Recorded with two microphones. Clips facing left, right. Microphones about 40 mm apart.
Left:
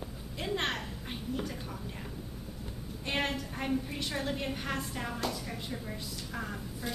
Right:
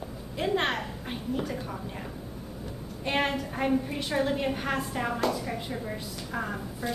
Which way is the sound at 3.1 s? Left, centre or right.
Centre.